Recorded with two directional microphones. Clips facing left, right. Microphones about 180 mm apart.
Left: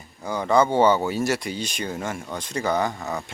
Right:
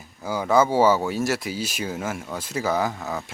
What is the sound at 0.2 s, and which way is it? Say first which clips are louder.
Speech: even; 5° right (ahead or behind).